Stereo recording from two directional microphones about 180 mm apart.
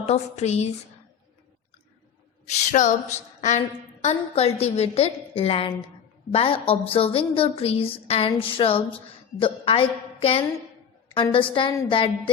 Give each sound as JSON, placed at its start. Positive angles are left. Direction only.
{"t": 0.0, "sound": "a woman's voice", "side_deg": 35}
{"t": 2.5, "sound": "a woman's voice", "side_deg": 40}